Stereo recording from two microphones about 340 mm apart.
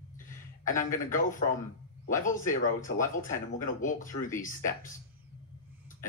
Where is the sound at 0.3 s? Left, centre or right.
Left.